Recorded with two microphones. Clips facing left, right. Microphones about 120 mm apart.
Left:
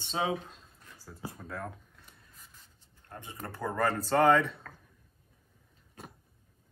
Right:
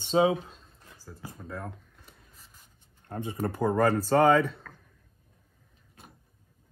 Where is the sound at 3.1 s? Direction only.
25° right (ahead or behind).